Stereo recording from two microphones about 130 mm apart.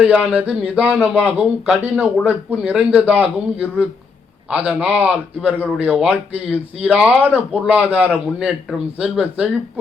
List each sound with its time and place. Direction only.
0.0 s speech: 5° right (ahead or behind)